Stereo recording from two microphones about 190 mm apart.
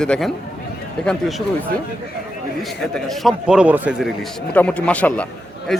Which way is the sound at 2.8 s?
Centre (ahead or behind).